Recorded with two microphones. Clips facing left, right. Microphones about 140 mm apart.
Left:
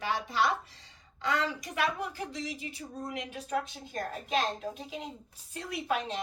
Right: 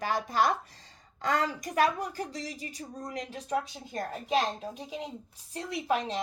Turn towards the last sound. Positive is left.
turn(degrees=-35)  # may be behind; listen again after turning